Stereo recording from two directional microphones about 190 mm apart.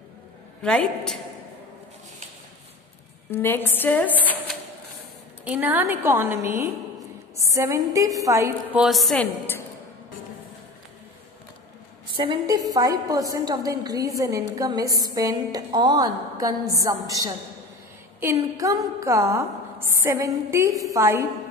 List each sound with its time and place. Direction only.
0.6 s a woman's voice: 5° left (ahead or behind)
3.3 s a woman's voice: 10° left (ahead or behind)
5.4 s a woman's voice: 10° right (ahead or behind)
8.7 s a woman's voice: centre (ahead or behind)
12.2 s a woman's voice: 20° right (ahead or behind)